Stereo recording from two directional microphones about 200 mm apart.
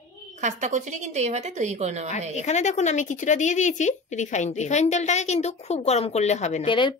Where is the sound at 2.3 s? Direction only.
35° left (ahead or behind).